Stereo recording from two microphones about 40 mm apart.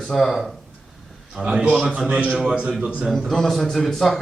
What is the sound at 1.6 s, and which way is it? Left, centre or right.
A man's voice, right.